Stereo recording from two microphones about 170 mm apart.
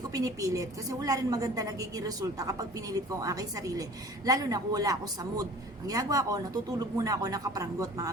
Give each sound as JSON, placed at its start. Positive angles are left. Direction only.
{"t": 0.1, "sound": "a woman's voice", "side_deg": -20}